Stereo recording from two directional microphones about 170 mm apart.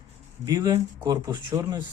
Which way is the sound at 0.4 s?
20° right (ahead or behind).